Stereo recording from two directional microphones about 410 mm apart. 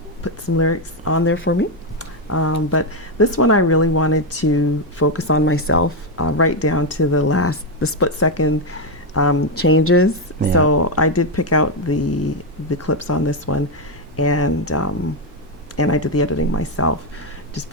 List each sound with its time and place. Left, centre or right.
0.5 s speech: left